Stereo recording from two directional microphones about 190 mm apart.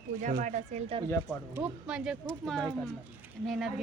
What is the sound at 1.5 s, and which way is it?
A man's voice, 5° right (ahead or behind).